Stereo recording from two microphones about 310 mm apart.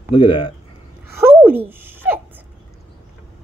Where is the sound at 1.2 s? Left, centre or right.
Centre.